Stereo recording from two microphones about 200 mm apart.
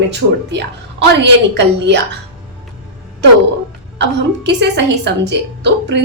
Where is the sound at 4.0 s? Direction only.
60° right (ahead or behind).